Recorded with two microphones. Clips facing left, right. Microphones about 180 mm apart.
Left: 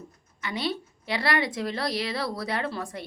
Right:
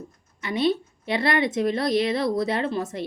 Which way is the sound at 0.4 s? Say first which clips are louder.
Right 7 dB; 25° right (ahead or behind).